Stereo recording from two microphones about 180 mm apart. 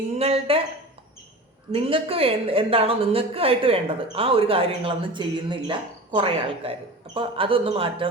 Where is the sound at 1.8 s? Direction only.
30° right (ahead or behind).